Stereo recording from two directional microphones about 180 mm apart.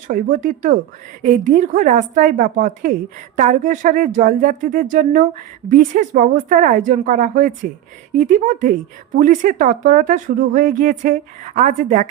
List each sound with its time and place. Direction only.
0.1 s speech: 50° right (ahead or behind)